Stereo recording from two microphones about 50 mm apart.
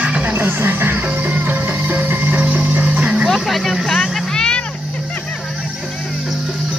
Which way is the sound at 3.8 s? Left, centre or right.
Centre.